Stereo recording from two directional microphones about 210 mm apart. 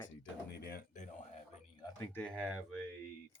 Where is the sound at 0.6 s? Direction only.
45° left (ahead or behind).